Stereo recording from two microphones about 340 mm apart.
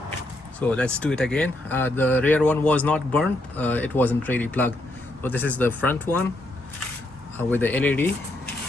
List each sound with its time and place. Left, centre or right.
0.7 s speech: centre
7.3 s speech: centre